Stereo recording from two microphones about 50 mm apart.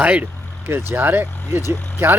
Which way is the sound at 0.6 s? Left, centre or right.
Right.